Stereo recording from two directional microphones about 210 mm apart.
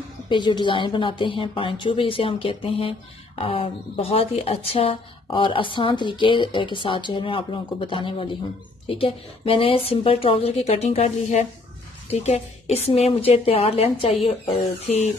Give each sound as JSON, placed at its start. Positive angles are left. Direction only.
{"t": 0.3, "sound": "a woman's voice", "side_deg": 20}